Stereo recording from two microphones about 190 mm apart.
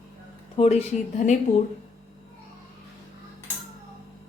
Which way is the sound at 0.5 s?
35° left (ahead or behind).